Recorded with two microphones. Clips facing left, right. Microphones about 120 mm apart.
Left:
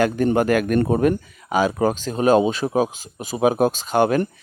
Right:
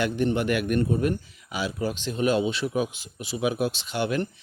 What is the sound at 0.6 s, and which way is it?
Speech, 90° left.